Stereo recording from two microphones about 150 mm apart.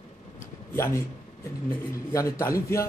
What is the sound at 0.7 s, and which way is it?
Speech, 15° left (ahead or behind).